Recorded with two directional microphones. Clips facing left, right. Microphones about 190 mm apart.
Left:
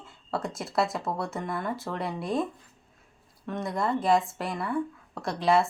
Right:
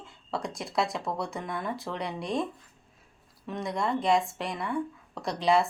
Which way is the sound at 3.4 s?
Centre (ahead or behind).